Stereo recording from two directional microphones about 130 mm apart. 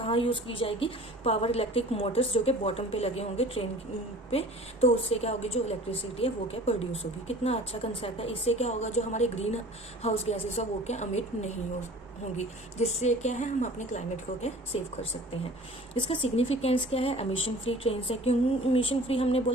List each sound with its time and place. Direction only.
0.0 s a woman's voice: 45° left (ahead or behind); by 14.0 s 65° left (ahead or behind)
16.0 s a woman's voice: 45° left (ahead or behind)